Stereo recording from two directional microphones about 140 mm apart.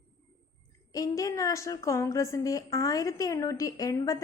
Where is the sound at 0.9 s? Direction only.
25° left (ahead or behind).